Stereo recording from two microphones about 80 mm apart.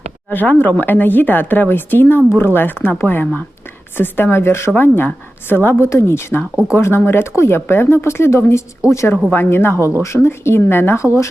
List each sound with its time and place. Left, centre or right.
0.3 s speech: left